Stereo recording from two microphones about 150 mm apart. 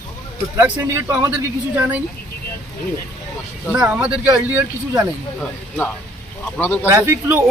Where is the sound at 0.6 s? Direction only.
15° right (ahead or behind).